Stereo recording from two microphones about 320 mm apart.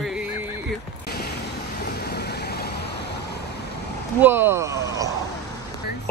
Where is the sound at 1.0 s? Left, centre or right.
Left.